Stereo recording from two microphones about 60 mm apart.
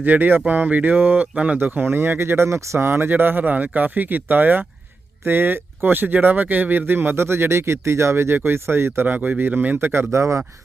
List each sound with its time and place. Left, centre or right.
0.0 s speech: right
9.0 s speech: right
10.1 s speech: right